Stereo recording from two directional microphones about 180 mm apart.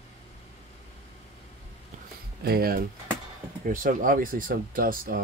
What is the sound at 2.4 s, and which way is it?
Speech, 55° right (ahead or behind).